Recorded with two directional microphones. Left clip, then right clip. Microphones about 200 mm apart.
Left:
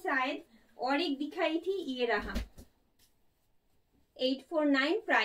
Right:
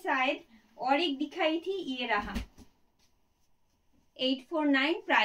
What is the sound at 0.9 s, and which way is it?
Speech, 10° right (ahead or behind).